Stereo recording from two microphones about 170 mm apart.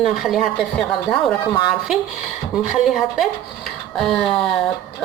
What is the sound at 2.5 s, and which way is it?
Speech, 5° right (ahead or behind).